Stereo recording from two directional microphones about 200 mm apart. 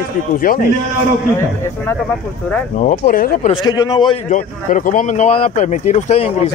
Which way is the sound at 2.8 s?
45° left (ahead or behind).